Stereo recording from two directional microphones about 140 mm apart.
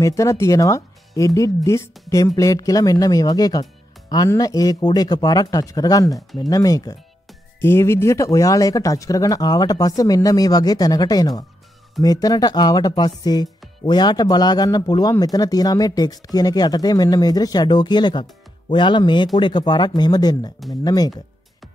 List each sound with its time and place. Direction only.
0.0 s speech: 20° left (ahead or behind)